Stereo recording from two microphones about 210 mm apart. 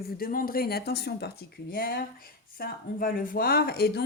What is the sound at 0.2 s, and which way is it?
Speech, 45° left (ahead or behind).